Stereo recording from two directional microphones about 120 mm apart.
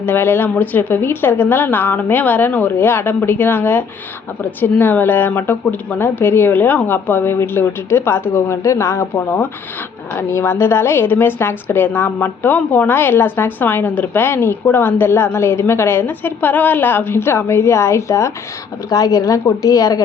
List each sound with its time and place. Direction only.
0.0 s a woman's voice: 15° left (ahead or behind)